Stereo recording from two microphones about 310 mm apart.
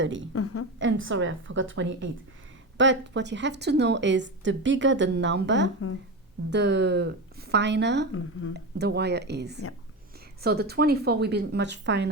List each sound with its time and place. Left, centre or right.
0.0 s a woman's voice: right
0.3 s a woman's voice: left
0.8 s a woman's voice: right
8.1 s speech: left
8.8 s a woman's voice: right